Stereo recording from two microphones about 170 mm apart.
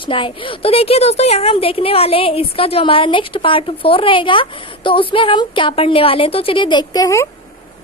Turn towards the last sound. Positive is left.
turn(degrees=20)  # may be behind; listen again after turning